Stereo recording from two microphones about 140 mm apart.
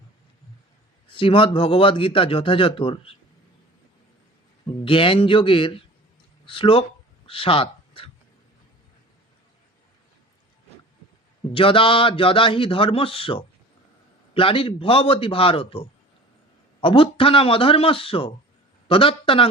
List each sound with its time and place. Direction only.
1.0 s a man's voice: 40° left (ahead or behind)
4.9 s a man's voice: 40° left (ahead or behind)
7.3 s a sound: 40° left (ahead or behind)
11.5 s a man's voice: 40° left (ahead or behind)